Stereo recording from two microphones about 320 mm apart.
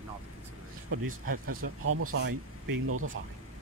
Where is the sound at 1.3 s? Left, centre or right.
Right.